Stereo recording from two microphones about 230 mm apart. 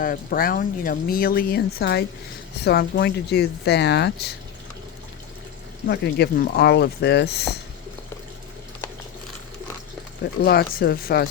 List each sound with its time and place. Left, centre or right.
0.0 s speech: left
5.9 s speech: left
10.4 s speech: left